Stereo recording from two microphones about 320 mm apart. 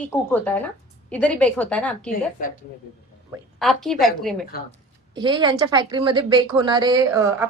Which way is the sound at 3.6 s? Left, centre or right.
Centre.